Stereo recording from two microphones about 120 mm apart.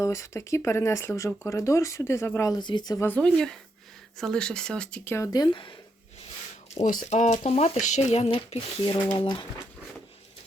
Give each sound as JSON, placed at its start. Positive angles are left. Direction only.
{"t": 0.0, "sound": "speech", "side_deg": 25}
{"t": 2.5, "sound": "speech", "side_deg": 40}
{"t": 3.0, "sound": "speech", "side_deg": 10}
{"t": 5.1, "sound": "speech", "side_deg": 30}
{"t": 6.7, "sound": "speech", "side_deg": 80}
{"t": 8.8, "sound": "speech", "side_deg": 40}